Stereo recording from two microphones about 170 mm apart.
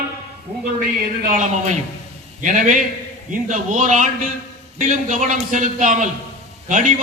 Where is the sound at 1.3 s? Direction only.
45° right (ahead or behind).